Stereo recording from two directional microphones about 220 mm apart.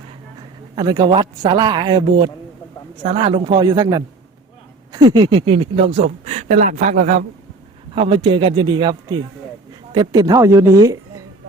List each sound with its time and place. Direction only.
0.8 s speech: 20° right (ahead or behind); by 7.3 s 35° right (ahead or behind)
7.9 s speech: 25° right (ahead or behind)